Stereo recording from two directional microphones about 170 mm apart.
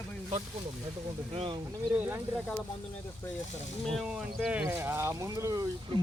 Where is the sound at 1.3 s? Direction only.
35° right (ahead or behind).